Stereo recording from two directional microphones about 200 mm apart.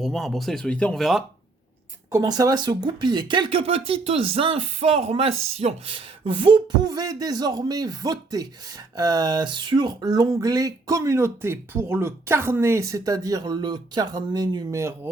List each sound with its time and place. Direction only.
0.0 s speech: centre (ahead or behind)
2.1 s speech: 20° right (ahead or behind)